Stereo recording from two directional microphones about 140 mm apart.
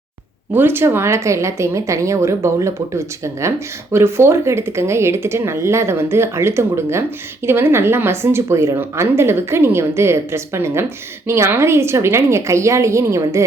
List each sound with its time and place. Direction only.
0.5 s a woman's voice: 15° right (ahead or behind)